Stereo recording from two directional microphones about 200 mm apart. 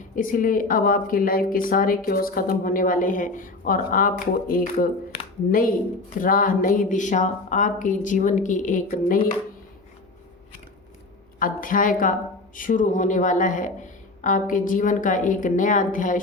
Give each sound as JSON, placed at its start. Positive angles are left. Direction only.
{"t": 0.2, "sound": "a woman's voice", "side_deg": 45}
{"t": 11.3, "sound": "a woman's voice", "side_deg": 45}